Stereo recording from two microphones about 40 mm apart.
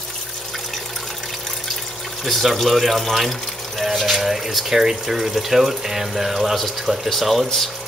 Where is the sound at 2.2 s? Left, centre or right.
Centre.